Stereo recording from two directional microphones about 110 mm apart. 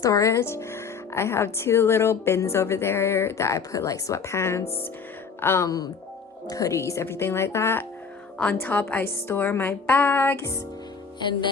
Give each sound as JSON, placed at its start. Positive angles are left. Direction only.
{"t": 0.0, "sound": "speech", "side_deg": 30}
{"t": 5.4, "sound": "music", "side_deg": 20}
{"t": 5.6, "sound": "speech", "side_deg": 35}
{"t": 11.2, "sound": "music", "side_deg": 45}